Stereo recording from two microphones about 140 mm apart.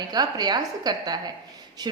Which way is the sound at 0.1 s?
30° right (ahead or behind).